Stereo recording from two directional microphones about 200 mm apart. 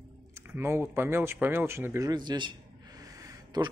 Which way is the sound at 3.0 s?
15° right (ahead or behind).